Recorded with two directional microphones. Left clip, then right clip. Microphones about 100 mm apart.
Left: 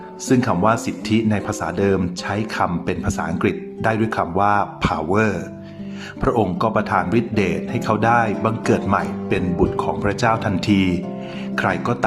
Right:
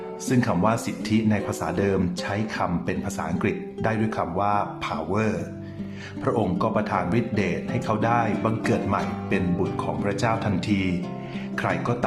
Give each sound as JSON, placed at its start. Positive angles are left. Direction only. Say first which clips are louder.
{"t": 0.3, "sound": "speech", "louder": "left 6 dB", "side_deg": 35}